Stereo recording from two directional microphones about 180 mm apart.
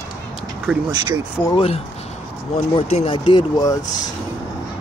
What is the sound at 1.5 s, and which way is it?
Speech, 30° left (ahead or behind).